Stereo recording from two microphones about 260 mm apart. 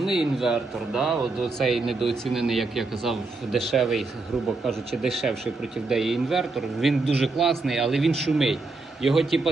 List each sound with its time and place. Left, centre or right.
0.0 s speech: centre
5.0 s speech: centre